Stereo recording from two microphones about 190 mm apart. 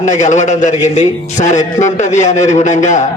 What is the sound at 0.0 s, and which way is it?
A man's voice, 40° left (ahead or behind).